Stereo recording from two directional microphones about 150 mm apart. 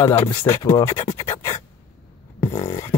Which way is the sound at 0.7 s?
20° left (ahead or behind).